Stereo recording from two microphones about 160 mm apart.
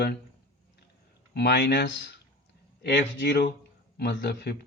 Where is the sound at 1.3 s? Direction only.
90° left.